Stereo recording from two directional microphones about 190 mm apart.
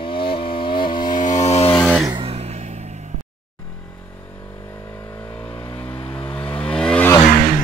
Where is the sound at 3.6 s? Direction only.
10° left (ahead or behind).